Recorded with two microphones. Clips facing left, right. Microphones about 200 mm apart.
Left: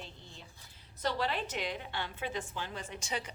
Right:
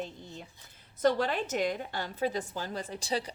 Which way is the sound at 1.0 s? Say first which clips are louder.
Right 7 dB; 45° right (ahead or behind).